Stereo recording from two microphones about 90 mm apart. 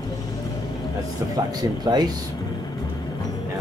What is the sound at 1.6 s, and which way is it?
Speech, 45° right (ahead or behind).